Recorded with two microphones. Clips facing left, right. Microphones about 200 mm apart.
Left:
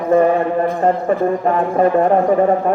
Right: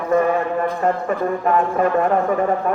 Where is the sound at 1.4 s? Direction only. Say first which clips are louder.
Left 2 dB; 30° left (ahead or behind).